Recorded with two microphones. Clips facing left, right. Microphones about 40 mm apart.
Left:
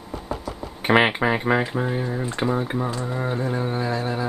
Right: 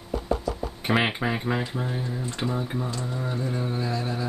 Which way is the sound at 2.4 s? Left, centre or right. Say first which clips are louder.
Left 5 dB; left.